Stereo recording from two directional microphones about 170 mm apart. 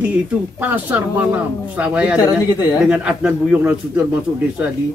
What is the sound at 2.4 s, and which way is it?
Speech, 25° left (ahead or behind).